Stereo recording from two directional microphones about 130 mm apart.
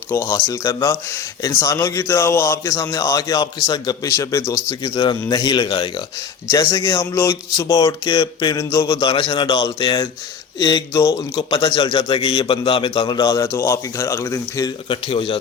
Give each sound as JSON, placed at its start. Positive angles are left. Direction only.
{"t": 0.1, "sound": "speech", "side_deg": 25}
{"t": 9.0, "sound": "a man's voice", "side_deg": 40}
{"t": 11.3, "sound": "a man's voice", "side_deg": 40}
{"t": 14.8, "sound": "a man's voice", "side_deg": 45}